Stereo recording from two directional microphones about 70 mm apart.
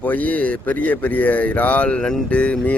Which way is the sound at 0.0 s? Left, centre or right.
Left.